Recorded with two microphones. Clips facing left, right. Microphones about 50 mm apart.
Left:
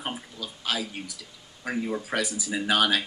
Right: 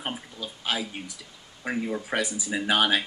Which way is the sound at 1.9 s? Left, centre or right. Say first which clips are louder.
Even; centre.